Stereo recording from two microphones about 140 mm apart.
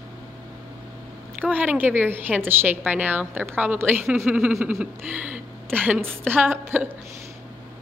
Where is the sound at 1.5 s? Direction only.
10° right (ahead or behind).